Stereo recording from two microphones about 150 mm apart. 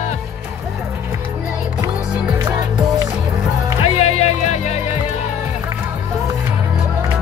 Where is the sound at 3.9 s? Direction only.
45° left (ahead or behind).